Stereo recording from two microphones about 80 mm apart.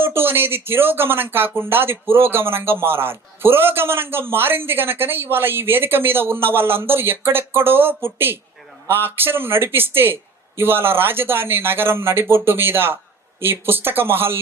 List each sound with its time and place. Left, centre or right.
0.0 s speech: right